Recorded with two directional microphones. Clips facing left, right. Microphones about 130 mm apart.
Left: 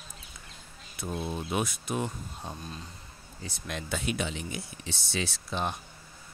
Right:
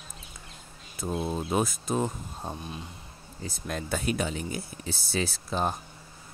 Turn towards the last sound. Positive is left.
turn(degrees=-40)  # may be behind; listen again after turning